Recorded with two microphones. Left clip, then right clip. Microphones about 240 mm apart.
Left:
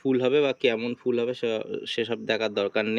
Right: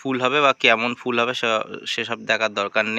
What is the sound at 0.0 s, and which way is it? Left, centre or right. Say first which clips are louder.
Speech: right 4 dB; centre.